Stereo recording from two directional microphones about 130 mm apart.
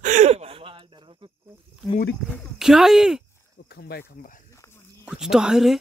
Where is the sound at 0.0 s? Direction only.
65° right (ahead or behind); by 1.3 s 40° right (ahead or behind).